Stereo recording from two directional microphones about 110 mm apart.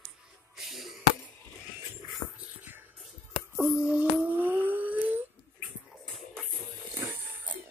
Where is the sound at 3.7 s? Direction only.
10° right (ahead or behind).